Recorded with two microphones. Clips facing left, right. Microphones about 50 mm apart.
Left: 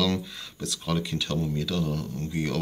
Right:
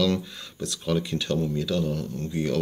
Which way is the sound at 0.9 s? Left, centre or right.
Centre.